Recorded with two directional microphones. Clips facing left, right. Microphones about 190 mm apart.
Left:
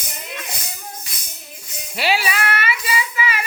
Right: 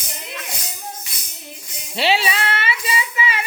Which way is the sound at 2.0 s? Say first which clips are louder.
Right 1 dB; 25° right (ahead or behind).